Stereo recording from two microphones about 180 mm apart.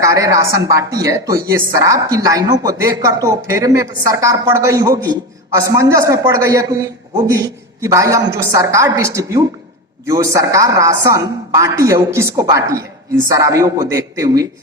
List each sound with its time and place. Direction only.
0.0 s a woman's voice: 15° right (ahead or behind)